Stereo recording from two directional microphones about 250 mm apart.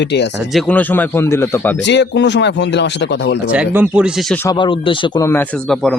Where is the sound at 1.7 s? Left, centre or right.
Left.